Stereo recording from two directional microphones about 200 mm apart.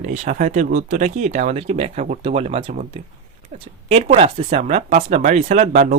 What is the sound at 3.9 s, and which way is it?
Speech, 30° right (ahead or behind).